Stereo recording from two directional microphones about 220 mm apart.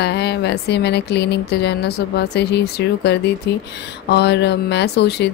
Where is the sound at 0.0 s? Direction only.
50° left (ahead or behind).